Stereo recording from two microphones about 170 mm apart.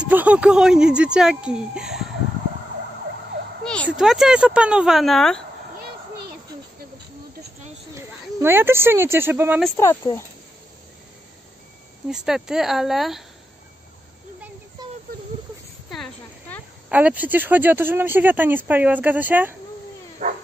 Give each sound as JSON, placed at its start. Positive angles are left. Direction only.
{"t": 0.0, "sound": "speech", "side_deg": -10}
{"t": 3.6, "sound": "a sound", "side_deg": 5}
{"t": 3.9, "sound": "speech", "side_deg": -5}
{"t": 7.9, "sound": "speech", "side_deg": -15}
{"t": 9.8, "sound": "speech", "side_deg": 15}
{"t": 12.1, "sound": "speech", "side_deg": -5}
{"t": 15.9, "sound": "a sound", "side_deg": 5}
{"t": 16.9, "sound": "speech", "side_deg": -10}
{"t": 20.2, "sound": "dog", "side_deg": -40}